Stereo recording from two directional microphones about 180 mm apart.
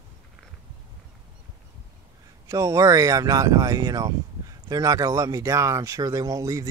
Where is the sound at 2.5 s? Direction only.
20° right (ahead or behind).